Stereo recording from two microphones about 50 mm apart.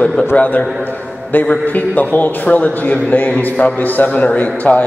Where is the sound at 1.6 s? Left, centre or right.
Left.